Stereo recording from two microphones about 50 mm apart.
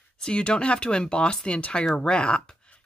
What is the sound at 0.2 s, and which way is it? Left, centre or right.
Speech, centre.